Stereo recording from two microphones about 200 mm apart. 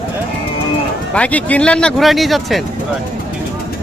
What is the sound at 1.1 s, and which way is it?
Speech, 5° left (ahead or behind).